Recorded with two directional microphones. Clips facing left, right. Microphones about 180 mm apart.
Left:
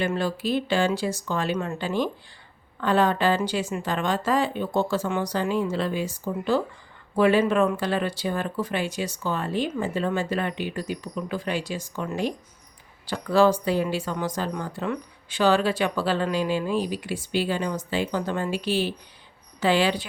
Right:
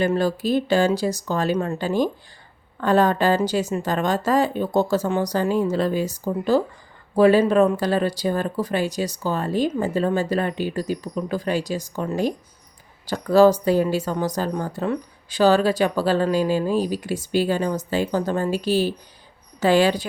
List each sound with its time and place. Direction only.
0.0 s a woman's voice: 40° right (ahead or behind)